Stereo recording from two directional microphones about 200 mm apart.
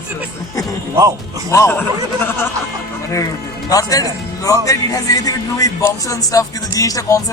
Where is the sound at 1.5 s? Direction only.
15° left (ahead or behind).